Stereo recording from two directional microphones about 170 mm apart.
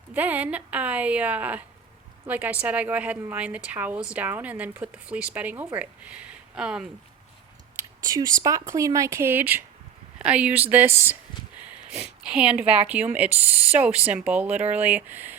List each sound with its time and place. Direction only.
0.1 s speech: 10° right (ahead or behind)
7.8 s speech: 20° right (ahead or behind)
12.2 s speech: 5° right (ahead or behind)